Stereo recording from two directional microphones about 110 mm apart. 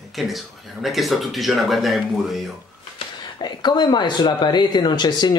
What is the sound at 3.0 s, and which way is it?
Speech, 40° left (ahead or behind).